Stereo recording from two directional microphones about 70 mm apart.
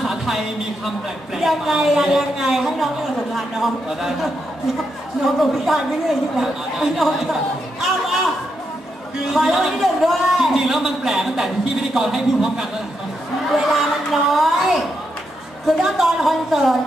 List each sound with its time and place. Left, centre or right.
0.1 s a sound: centre
1.4 s a woman's voice: centre
9.3 s a woman's voice: centre
13.7 s a woman's voice: centre